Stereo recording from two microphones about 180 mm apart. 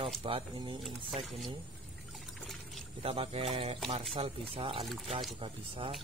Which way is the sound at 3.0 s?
30° right (ahead or behind).